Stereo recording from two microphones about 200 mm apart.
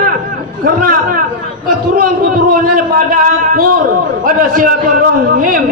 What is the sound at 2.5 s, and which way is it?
A man's voice, 45° right (ahead or behind).